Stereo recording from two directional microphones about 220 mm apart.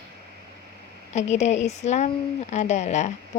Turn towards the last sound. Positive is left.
turn(degrees=30)  # may be behind; listen again after turning